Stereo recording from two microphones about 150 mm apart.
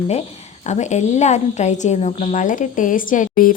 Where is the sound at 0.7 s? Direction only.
50° left (ahead or behind).